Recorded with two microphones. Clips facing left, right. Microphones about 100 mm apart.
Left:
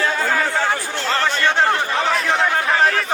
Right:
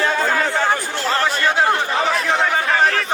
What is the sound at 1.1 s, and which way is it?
Chatter, 5° right (ahead or behind).